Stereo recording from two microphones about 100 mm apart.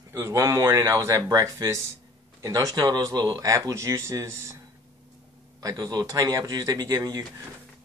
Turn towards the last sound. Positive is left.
turn(degrees=-40)  # may be behind; listen again after turning